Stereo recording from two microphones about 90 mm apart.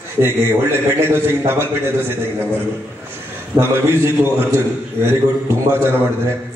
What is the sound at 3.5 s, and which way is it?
A man's voice, 25° right (ahead or behind).